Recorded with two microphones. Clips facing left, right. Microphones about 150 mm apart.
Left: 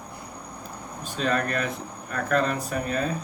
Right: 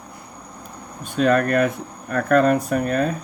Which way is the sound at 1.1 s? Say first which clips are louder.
Right 9 dB; 50° right (ahead or behind).